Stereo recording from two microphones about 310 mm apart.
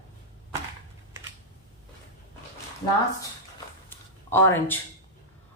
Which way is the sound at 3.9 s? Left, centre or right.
Centre.